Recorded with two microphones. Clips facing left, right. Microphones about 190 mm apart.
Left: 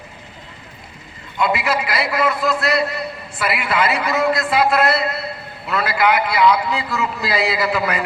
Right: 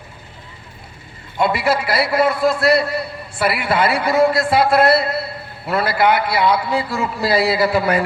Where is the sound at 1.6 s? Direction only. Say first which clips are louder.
Right 3 dB; 30° right (ahead or behind).